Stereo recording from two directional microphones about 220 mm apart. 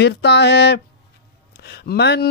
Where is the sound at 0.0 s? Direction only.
50° left (ahead or behind).